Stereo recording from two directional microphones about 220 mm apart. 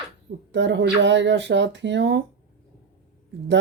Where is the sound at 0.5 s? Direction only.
55° right (ahead or behind).